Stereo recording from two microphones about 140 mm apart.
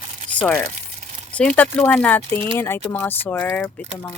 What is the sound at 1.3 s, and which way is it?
Speech, 10° left (ahead or behind).